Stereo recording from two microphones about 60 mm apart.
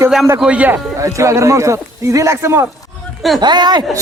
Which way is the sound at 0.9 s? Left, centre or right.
Right.